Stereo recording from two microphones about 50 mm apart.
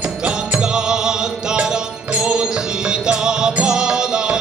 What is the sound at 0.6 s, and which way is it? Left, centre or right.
Music, centre.